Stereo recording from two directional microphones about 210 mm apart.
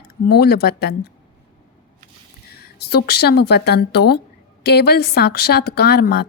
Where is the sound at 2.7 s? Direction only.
50° left (ahead or behind).